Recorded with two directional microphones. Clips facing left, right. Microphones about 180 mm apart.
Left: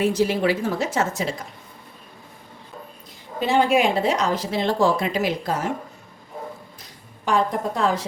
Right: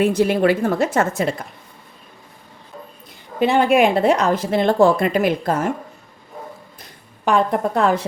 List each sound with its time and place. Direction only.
0.0 s speech: 55° right (ahead or behind)
3.4 s speech: 60° right (ahead or behind)
6.8 s a woman's voice: 60° right (ahead or behind)